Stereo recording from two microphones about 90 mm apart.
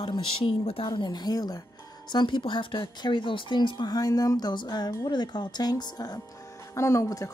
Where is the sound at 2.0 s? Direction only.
55° left (ahead or behind).